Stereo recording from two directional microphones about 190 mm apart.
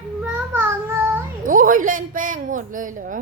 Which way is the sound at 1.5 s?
45° right (ahead or behind).